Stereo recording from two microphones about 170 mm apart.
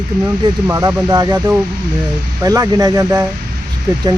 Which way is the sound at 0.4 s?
20° right (ahead or behind).